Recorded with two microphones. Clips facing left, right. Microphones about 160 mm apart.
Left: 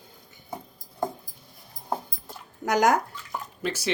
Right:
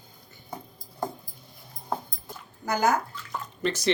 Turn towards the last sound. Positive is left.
turn(degrees=10)  # may be behind; listen again after turning